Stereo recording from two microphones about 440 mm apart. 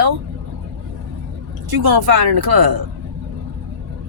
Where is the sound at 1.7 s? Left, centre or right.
Right.